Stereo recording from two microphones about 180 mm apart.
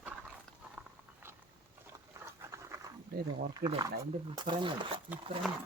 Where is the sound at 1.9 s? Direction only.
15° right (ahead or behind).